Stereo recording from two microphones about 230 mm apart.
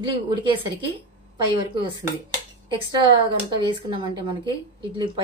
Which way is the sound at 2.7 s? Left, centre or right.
Right.